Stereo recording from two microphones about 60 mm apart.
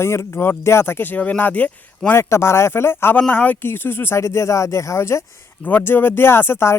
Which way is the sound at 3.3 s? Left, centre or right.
Left.